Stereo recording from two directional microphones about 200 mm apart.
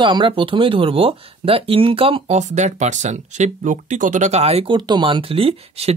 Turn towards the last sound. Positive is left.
turn(degrees=-30)  # may be behind; listen again after turning